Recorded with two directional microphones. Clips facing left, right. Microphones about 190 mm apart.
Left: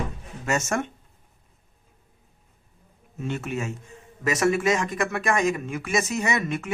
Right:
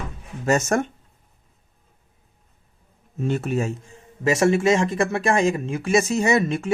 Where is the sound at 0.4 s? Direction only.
35° right (ahead or behind).